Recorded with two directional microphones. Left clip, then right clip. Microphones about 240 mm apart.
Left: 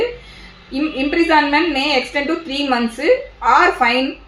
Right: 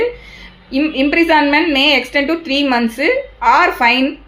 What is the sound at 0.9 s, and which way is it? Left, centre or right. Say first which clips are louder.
A woman's voice: right 2 dB; right.